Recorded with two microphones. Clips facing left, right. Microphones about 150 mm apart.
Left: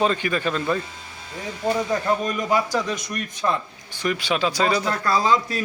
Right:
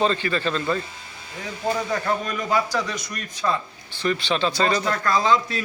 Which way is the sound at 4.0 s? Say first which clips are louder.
Even; 10° left (ahead or behind).